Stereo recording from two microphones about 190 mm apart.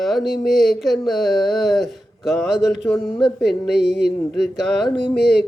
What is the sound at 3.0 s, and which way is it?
Speech, 25° left (ahead or behind).